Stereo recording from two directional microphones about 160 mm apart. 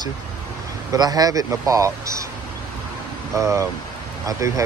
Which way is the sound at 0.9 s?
25° right (ahead or behind).